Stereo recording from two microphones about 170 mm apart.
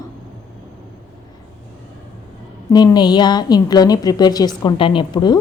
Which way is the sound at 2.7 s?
25° left (ahead or behind).